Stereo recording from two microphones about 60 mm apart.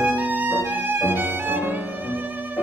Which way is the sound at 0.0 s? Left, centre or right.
Right.